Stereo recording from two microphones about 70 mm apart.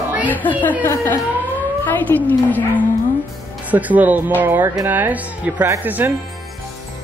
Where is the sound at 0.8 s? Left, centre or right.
Left.